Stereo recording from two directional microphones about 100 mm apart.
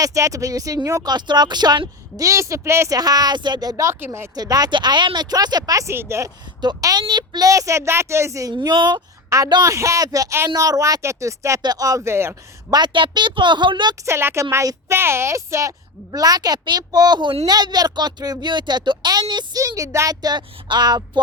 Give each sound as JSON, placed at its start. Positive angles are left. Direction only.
{"t": 0.0, "sound": "a woman's voice", "side_deg": -35}
{"t": 1.0, "sound": "a woman's voice", "side_deg": -45}
{"t": 3.0, "sound": "a woman's voice", "side_deg": -40}
{"t": 4.0, "sound": "speech", "side_deg": -25}
{"t": 4.4, "sound": "speech", "side_deg": -40}
{"t": 5.9, "sound": "speech", "side_deg": -25}
{"t": 6.6, "sound": "a woman's voice", "side_deg": -45}
{"t": 8.5, "sound": "speech", "side_deg": -50}
{"t": 9.5, "sound": "a woman's voice", "side_deg": -35}
{"t": 12.7, "sound": "speech", "side_deg": -50}
{"t": 14.0, "sound": "a woman's voice", "side_deg": -25}
{"t": 19.6, "sound": "a woman's voice", "side_deg": -35}